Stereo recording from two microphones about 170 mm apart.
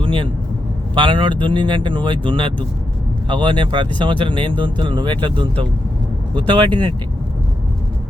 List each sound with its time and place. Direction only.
0.0 s vehicle: 30° right (ahead or behind)
0.9 s speech: 25° right (ahead or behind)